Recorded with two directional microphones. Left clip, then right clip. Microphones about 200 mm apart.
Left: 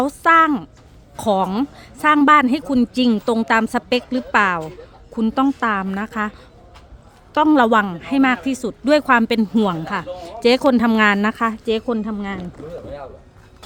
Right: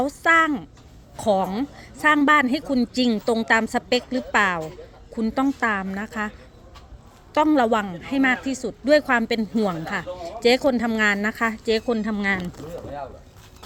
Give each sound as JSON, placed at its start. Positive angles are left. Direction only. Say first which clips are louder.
{"t": 0.0, "sound": "speech", "louder": "left 5 dB", "side_deg": 25}
{"t": 7.3, "sound": "speech", "louder": "left 5 dB", "side_deg": 25}